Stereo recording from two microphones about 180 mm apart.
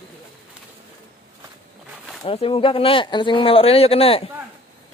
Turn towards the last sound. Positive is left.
turn(degrees=35)  # may be behind; listen again after turning